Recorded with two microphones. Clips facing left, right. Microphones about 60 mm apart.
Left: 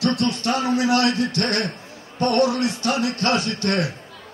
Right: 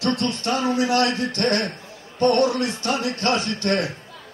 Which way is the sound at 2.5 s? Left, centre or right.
Right.